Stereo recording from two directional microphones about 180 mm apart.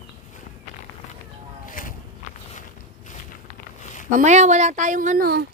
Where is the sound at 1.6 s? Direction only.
50° left (ahead or behind).